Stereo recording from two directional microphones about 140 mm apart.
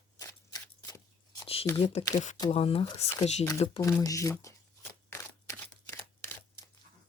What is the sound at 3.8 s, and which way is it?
Speech, 25° left (ahead or behind).